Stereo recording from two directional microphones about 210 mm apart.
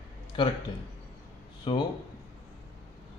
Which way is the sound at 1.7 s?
25° left (ahead or behind).